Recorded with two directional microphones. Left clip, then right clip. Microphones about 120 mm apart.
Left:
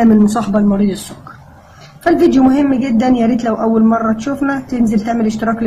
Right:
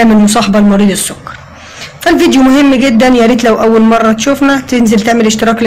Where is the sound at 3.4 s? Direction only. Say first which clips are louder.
Right 7 dB; 30° right (ahead or behind).